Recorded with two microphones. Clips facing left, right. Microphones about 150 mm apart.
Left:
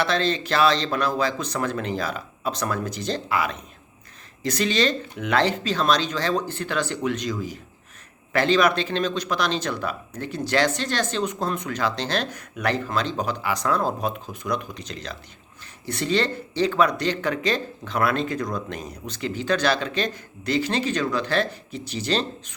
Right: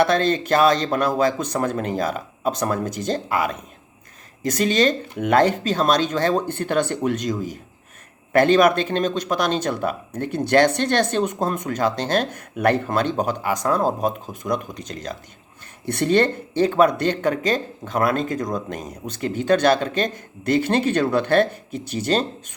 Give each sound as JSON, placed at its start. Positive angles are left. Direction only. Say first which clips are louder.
{"t": 0.0, "sound": "speech", "louder": "right 5 dB", "side_deg": -50}